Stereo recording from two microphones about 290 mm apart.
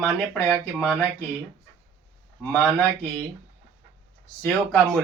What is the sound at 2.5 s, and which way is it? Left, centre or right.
Speech, centre.